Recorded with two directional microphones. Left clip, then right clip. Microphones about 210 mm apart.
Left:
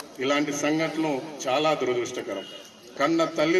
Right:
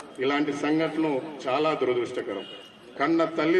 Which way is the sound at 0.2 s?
45° left (ahead or behind).